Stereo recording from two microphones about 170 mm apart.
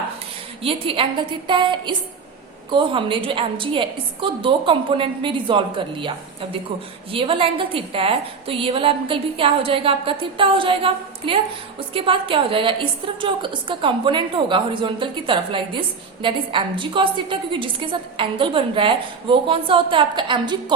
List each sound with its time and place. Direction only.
0.6 s a woman's voice: 35° right (ahead or behind)